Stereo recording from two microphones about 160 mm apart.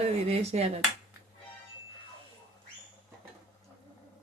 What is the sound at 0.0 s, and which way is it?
Speech, 40° right (ahead or behind).